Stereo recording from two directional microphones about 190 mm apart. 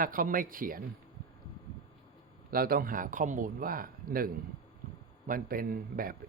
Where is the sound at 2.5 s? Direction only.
50° right (ahead or behind).